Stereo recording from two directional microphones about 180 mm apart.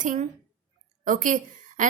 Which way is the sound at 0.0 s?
45° right (ahead or behind).